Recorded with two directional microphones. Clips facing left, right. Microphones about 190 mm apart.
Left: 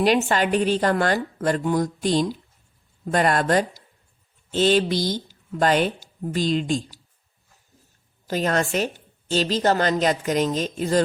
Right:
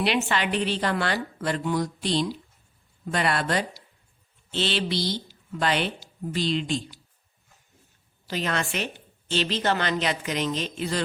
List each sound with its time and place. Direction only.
0.0 s a woman's voice: 45° left (ahead or behind)
8.3 s a woman's voice: 45° left (ahead or behind)